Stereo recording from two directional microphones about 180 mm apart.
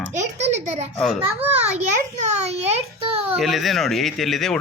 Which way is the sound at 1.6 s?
35° right (ahead or behind).